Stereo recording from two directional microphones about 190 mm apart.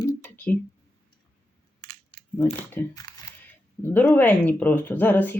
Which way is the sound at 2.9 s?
20° left (ahead or behind).